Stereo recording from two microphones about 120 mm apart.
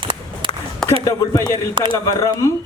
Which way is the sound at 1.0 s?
30° left (ahead or behind).